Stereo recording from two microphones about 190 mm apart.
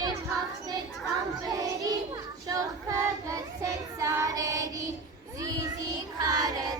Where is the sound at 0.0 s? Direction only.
20° right (ahead or behind).